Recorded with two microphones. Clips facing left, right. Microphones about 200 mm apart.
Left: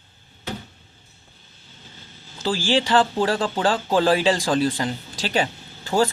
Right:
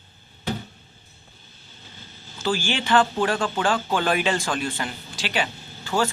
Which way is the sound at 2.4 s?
30° left (ahead or behind).